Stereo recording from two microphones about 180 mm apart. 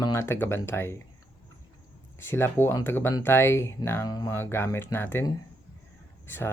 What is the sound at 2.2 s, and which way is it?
Speech, 15° left (ahead or behind).